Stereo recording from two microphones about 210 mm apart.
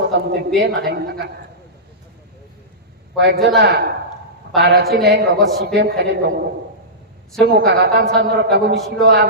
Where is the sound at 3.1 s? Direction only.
55° right (ahead or behind).